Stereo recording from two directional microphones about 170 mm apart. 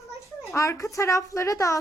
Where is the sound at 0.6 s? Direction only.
20° left (ahead or behind).